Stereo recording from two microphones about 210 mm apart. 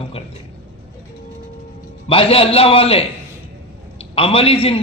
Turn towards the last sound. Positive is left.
turn(degrees=25)  # may be behind; listen again after turning